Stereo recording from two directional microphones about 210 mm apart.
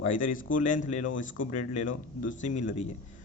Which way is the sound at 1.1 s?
65° left (ahead or behind).